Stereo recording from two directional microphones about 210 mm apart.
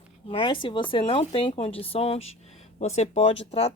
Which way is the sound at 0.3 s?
25° left (ahead or behind).